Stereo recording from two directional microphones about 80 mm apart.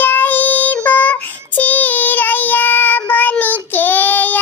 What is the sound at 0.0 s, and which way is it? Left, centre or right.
Child singing, left.